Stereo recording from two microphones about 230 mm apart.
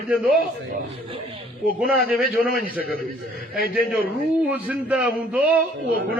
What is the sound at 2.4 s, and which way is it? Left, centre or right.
Speech, right.